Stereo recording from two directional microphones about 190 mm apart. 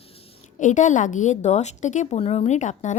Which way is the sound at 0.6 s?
40° left (ahead or behind).